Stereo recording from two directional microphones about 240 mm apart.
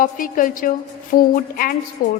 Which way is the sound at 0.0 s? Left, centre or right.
Left.